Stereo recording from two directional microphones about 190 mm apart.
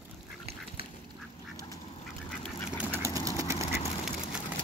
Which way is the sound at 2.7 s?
10° right (ahead or behind).